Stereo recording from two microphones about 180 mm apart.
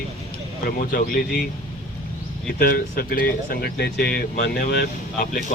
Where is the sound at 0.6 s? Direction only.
55° left (ahead or behind).